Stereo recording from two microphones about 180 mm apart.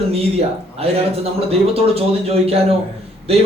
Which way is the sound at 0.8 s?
35° right (ahead or behind).